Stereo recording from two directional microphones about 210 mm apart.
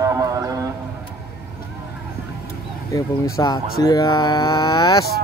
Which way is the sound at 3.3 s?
20° left (ahead or behind).